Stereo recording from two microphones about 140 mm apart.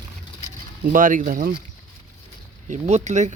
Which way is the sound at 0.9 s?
75° right (ahead or behind).